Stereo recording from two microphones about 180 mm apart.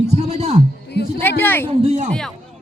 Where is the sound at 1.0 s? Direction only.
65° left (ahead or behind).